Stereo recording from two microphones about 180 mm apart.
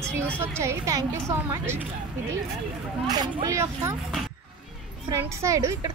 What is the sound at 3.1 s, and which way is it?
Speech, 20° right (ahead or behind).